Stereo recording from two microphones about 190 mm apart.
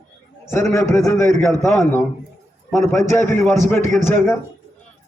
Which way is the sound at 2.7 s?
Centre (ahead or behind).